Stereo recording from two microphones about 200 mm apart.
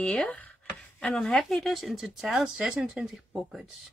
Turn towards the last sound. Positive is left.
turn(degrees=0)  # may be behind; listen again after turning